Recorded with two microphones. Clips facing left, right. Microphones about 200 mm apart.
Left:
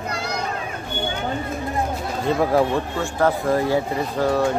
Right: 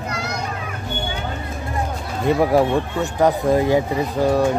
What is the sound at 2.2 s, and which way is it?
Speech, 15° right (ahead or behind).